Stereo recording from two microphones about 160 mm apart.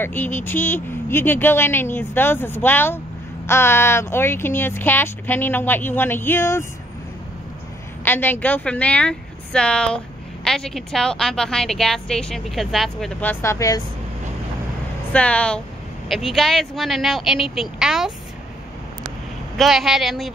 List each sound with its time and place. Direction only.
0.0 s speech: 10° left (ahead or behind)
8.0 s speech: 10° left (ahead or behind)
13.2 s speech: 15° left (ahead or behind)
15.1 s speech: 10° left (ahead or behind)
19.5 s speech: centre (ahead or behind)